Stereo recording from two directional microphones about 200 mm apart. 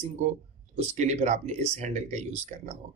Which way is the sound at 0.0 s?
35° right (ahead or behind).